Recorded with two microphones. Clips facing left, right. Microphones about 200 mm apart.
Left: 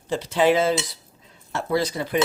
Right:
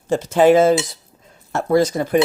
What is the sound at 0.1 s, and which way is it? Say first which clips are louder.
Cutlery: right 7 dB; 45° right (ahead or behind).